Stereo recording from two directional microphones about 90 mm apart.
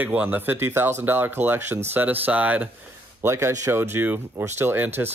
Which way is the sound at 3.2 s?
30° right (ahead or behind).